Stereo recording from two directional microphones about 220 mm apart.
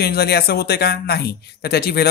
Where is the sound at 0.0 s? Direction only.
45° left (ahead or behind).